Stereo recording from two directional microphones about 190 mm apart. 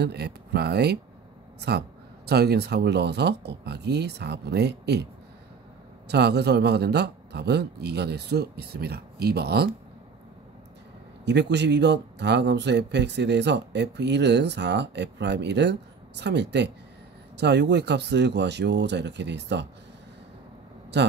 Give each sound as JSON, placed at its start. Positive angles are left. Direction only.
{"t": 0.0, "sound": "speech", "side_deg": -60}
{"t": 6.0, "sound": "speech", "side_deg": -60}
{"t": 11.2, "sound": "speech", "side_deg": -65}
{"t": 20.9, "sound": "speech", "side_deg": -65}